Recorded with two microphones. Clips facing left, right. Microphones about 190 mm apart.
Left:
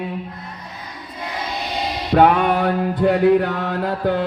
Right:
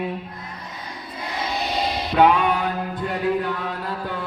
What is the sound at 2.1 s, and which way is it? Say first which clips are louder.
Music: left 3 dB; 50° left (ahead or behind).